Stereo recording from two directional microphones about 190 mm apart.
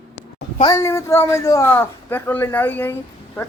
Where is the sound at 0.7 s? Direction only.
15° left (ahead or behind).